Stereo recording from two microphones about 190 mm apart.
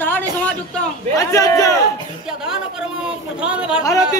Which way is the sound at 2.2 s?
5° right (ahead or behind).